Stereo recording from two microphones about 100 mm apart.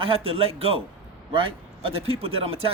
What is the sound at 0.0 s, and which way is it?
A man's voice, 65° right (ahead or behind).